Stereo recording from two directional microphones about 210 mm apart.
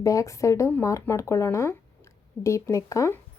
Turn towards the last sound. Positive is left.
turn(degrees=15)  # may be behind; listen again after turning